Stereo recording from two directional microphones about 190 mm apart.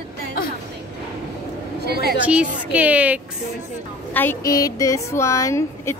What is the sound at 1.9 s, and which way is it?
Speech, 55° right (ahead or behind).